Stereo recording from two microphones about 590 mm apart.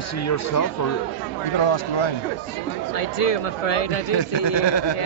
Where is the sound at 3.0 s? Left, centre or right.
Left.